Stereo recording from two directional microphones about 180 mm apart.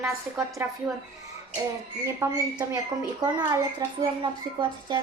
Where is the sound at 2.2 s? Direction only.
20° right (ahead or behind).